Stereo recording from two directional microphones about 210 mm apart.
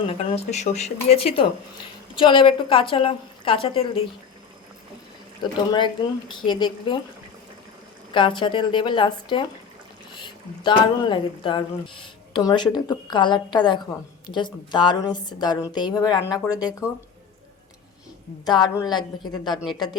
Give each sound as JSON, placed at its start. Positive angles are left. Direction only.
{"t": 0.1, "sound": "a woman's voice", "side_deg": 30}
{"t": 5.4, "sound": "a woman's voice", "side_deg": 20}
{"t": 8.1, "sound": "a woman's voice", "side_deg": 20}
{"t": 18.4, "sound": "a woman's voice", "side_deg": 20}